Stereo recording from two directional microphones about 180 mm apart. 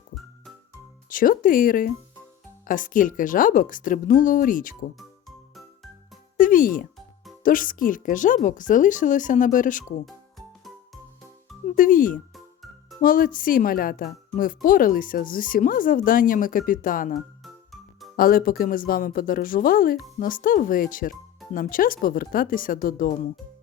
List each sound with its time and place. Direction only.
1.1 s a woman's voice: 50° left (ahead or behind)
6.4 s a woman's voice: 50° left (ahead or behind)
10.1 s music: centre (ahead or behind)
11.7 s a woman's voice: 50° left (ahead or behind)
17.4 s music: centre (ahead or behind)
18.2 s a woman's voice: 50° left (ahead or behind)